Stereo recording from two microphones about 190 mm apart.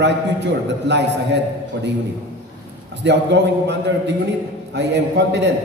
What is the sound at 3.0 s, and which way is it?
A man's voice, 65° right (ahead or behind).